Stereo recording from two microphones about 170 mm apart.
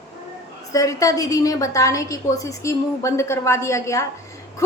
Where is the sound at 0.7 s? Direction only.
20° left (ahead or behind).